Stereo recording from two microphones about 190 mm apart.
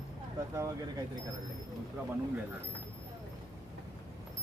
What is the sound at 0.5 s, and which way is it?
Speech, 15° right (ahead or behind).